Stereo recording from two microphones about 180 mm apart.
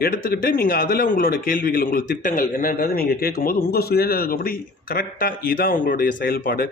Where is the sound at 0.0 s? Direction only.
55° left (ahead or behind).